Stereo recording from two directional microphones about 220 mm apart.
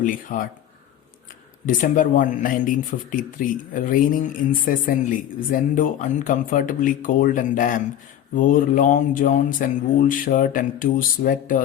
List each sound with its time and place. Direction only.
0.0 s speech: 35° left (ahead or behind)
1.6 s speech: 35° left (ahead or behind)